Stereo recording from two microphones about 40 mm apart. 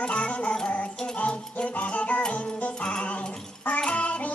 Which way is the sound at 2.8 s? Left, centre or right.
Left.